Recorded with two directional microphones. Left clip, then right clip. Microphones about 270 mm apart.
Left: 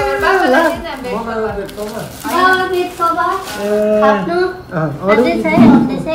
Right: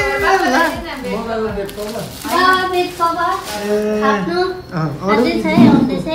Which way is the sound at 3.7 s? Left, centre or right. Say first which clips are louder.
Left 5 dB; centre.